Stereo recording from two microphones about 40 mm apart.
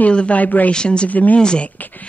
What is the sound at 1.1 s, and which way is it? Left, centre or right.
Speech, left.